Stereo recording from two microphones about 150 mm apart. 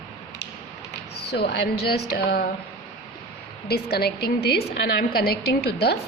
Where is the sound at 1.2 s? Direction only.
90° left.